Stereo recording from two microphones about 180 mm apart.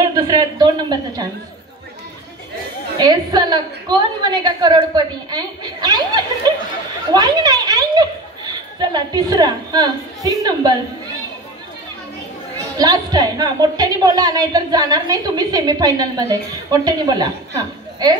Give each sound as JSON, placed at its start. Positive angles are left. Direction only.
{"t": 0.1, "sound": "speech", "side_deg": -20}
{"t": 3.0, "sound": "a woman's voice", "side_deg": -25}
{"t": 12.7, "sound": "a woman's voice", "side_deg": -20}